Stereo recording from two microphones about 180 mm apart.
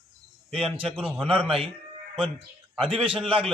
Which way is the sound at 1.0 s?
5° right (ahead or behind).